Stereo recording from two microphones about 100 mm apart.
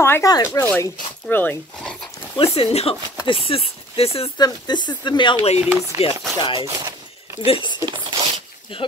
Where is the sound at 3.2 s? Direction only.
65° left (ahead or behind).